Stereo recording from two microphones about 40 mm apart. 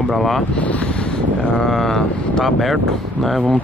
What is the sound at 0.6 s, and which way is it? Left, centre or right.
Speech, left.